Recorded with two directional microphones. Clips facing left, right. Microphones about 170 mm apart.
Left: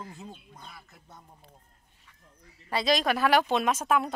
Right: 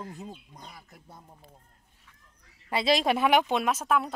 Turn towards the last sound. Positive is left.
turn(degrees=0)  # may be behind; listen again after turning